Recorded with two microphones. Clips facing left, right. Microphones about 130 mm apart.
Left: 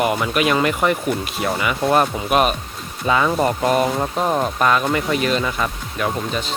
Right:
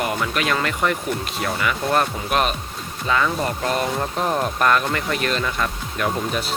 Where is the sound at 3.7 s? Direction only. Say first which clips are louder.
Left 4 dB; 5° left (ahead or behind).